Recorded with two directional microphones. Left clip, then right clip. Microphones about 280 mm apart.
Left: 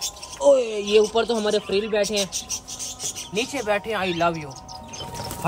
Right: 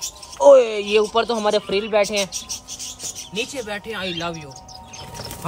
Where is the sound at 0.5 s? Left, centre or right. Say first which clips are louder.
Right 6 dB; right.